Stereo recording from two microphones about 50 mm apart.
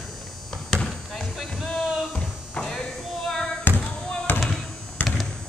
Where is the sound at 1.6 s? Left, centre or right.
Centre.